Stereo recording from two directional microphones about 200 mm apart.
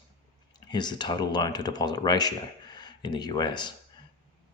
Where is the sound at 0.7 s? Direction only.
20° left (ahead or behind).